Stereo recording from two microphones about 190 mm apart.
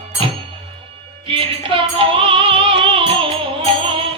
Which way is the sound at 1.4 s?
25° right (ahead or behind).